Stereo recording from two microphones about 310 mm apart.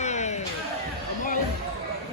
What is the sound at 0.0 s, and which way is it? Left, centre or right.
Music, left.